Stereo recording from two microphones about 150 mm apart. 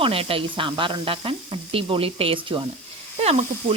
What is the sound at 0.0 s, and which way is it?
Speech, 40° right (ahead or behind).